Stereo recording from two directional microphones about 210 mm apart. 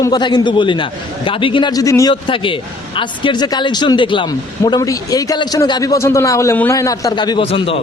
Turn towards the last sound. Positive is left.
turn(degrees=25)  # may be behind; listen again after turning